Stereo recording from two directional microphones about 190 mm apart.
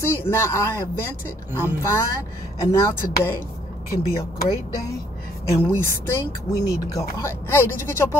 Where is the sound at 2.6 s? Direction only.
15° left (ahead or behind).